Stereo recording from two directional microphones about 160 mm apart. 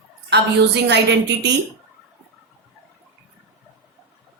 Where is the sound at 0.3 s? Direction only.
90° right.